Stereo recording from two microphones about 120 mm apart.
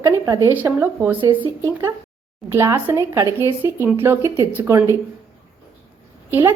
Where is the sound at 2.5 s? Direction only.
20° right (ahead or behind).